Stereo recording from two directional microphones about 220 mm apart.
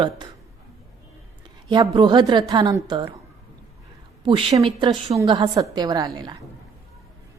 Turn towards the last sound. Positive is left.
turn(degrees=-20)  # may be behind; listen again after turning